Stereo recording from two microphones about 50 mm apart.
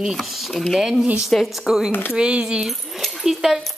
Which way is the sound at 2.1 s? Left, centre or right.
Centre.